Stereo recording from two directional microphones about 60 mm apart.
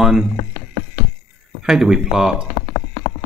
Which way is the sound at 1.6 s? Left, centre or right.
Centre.